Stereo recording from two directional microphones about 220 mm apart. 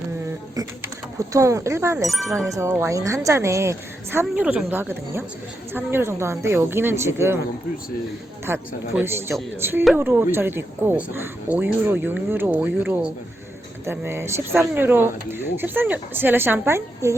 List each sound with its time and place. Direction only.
0.5 s speech: 15° right (ahead or behind)
8.4 s speech: 10° right (ahead or behind)